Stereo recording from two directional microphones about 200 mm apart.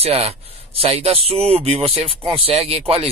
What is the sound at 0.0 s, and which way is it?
Speech, 30° right (ahead or behind).